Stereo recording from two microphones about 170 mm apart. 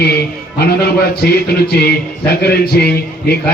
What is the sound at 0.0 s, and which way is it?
Music, 70° left (ahead or behind).